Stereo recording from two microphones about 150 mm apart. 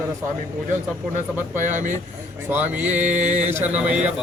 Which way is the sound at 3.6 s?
10° right (ahead or behind).